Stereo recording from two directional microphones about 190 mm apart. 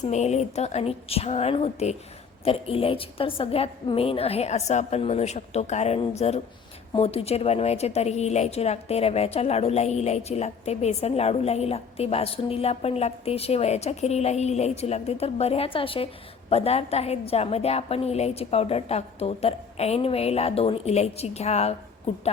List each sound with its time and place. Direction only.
0.1 s a woman's voice: 35° left (ahead or behind)